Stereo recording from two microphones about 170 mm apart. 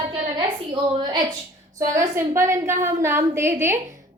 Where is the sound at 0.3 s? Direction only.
30° right (ahead or behind).